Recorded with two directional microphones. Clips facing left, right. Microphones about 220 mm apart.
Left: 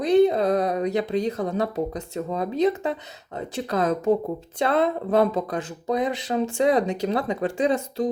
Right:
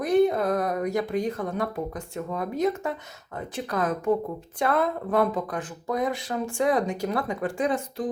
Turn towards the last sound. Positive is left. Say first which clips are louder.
# left 3 dB
turn(degrees=25)  # may be behind; listen again after turning